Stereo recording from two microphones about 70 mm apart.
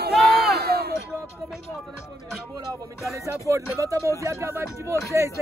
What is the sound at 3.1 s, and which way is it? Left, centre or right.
Speech, right.